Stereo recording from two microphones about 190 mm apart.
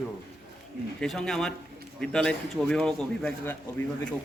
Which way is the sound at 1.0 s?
5° left (ahead or behind).